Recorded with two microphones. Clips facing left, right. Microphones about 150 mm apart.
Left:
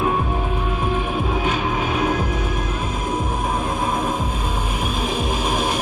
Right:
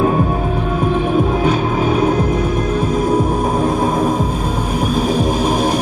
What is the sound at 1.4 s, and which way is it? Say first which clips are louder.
Music: right 6 dB; 40° right (ahead or behind).